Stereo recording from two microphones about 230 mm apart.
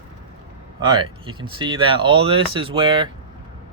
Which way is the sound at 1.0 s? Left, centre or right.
Right.